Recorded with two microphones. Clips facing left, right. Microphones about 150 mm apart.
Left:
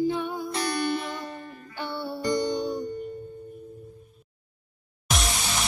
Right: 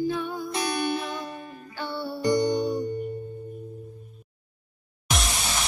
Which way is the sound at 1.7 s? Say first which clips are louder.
Even; 20° left (ahead or behind).